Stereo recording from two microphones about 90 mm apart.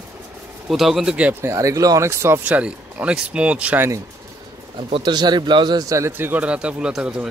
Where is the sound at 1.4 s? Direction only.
35° right (ahead or behind).